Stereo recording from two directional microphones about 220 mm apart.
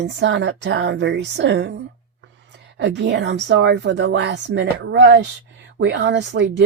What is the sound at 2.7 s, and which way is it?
A woman's voice, 50° right (ahead or behind).